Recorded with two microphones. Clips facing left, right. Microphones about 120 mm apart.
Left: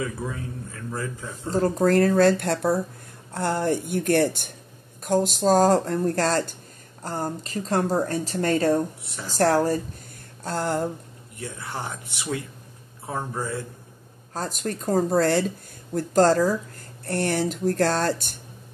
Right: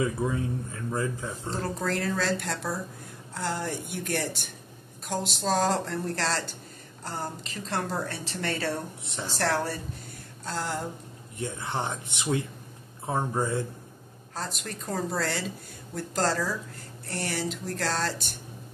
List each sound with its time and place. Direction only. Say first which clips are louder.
0.0 s speech: right 3 dB; 20° right (ahead or behind)
1.5 s a woman's voice: left 11 dB; 45° left (ahead or behind)
9.0 s speech: right 1 dB; 25° right (ahead or behind)
9.3 s a woman's voice: left 8 dB; 40° left (ahead or behind)
11.3 s speech: right 2 dB; 25° right (ahead or behind)
14.3 s speech: left 7 dB; 45° left (ahead or behind)